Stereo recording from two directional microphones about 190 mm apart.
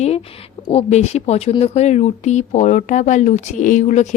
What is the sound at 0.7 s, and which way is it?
A woman's voice, 35° left (ahead or behind).